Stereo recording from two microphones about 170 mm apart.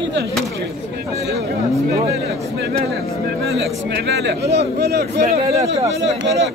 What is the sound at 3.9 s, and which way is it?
Speech, 75° right (ahead or behind).